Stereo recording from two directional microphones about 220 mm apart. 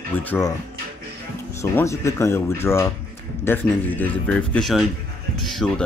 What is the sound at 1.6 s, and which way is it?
Speech, 15° left (ahead or behind).